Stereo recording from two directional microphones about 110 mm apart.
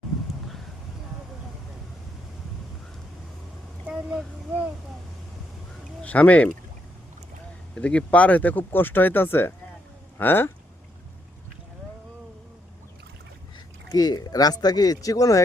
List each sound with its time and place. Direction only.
3.8 s a sound: 10° right (ahead or behind)
6.0 s speech: 15° left (ahead or behind)
7.8 s speech: 10° left (ahead or behind)
13.9 s speech: 35° left (ahead or behind)